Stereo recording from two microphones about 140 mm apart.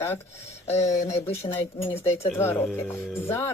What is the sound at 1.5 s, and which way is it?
Speech, 45° left (ahead or behind).